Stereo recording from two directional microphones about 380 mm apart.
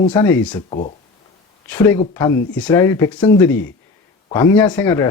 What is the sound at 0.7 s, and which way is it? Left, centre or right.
Speech, centre.